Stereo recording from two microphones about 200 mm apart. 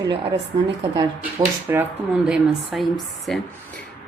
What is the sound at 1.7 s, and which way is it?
Speech, 10° right (ahead or behind).